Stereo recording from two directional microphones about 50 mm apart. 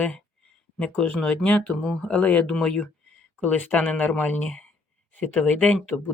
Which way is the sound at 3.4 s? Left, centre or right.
Left.